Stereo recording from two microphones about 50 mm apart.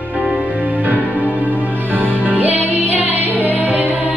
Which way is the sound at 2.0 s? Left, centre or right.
Right.